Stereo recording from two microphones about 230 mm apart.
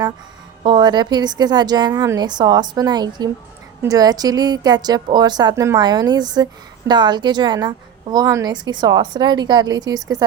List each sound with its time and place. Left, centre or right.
0.6 s a woman's voice: centre